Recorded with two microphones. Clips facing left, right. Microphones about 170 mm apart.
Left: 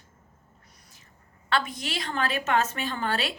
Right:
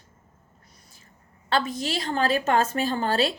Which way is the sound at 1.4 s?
30° right (ahead or behind).